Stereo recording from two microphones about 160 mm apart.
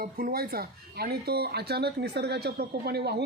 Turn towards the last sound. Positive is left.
turn(degrees=-90)